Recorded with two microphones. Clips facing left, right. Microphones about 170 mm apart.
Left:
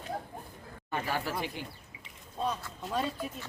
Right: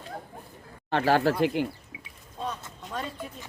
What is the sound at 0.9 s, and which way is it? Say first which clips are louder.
Speech: right 11 dB; 80° right.